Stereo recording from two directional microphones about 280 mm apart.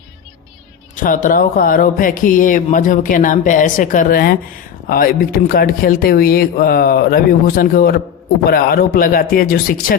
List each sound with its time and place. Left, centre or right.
0.9 s speech: left